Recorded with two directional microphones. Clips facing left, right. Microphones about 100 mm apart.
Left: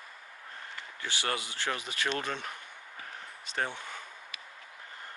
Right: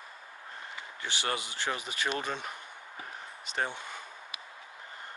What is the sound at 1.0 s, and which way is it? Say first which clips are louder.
Speech: even; 20° right (ahead or behind).